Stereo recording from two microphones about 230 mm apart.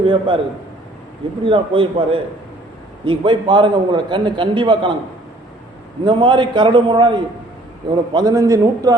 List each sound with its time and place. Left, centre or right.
0.0 s a man's voice: right
1.5 s a man's voice: right
6.1 s a man's voice: right